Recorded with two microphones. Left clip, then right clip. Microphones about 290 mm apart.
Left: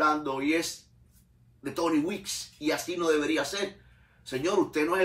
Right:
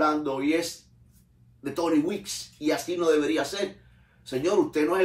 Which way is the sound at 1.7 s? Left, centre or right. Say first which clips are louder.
Right 3 dB; centre.